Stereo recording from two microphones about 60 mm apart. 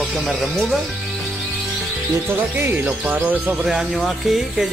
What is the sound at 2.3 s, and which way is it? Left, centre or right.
Speech, right.